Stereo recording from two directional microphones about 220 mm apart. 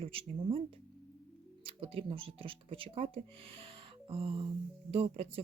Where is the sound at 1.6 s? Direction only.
25° right (ahead or behind).